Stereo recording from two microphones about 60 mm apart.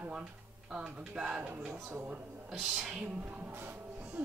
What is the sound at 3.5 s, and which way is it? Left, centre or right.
Music, right.